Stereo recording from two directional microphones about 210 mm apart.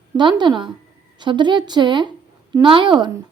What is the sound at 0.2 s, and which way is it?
Speech, 20° right (ahead or behind).